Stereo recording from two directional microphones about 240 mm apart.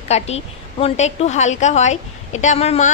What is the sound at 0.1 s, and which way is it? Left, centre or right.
A woman's voice, left.